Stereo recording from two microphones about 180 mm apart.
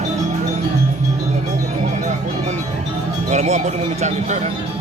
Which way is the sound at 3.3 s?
40° right (ahead or behind).